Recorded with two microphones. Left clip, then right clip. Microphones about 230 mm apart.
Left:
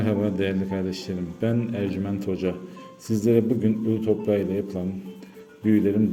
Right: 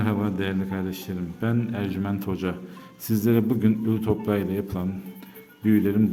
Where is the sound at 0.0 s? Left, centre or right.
Centre.